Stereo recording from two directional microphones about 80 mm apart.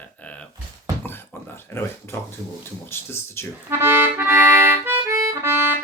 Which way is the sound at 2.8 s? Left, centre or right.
Left.